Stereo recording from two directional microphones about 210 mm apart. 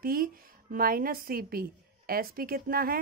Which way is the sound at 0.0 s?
45° right (ahead or behind).